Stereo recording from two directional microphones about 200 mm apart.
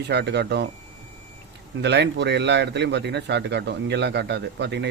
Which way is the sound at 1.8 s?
60° right (ahead or behind).